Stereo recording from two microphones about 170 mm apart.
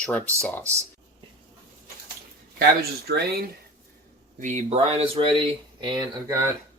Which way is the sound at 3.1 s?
70° right (ahead or behind).